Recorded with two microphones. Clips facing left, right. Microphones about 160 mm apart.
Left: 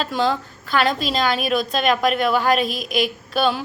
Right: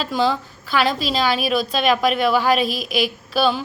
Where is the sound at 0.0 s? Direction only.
5° right (ahead or behind).